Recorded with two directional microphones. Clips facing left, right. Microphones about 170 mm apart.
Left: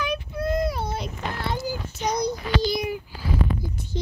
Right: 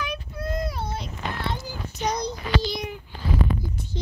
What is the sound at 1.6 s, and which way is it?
Child singing, 10° left (ahead or behind).